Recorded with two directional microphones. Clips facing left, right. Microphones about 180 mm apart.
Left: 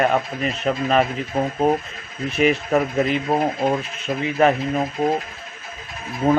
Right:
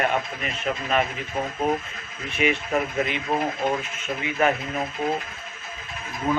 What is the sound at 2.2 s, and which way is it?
Speech, 40° left (ahead or behind).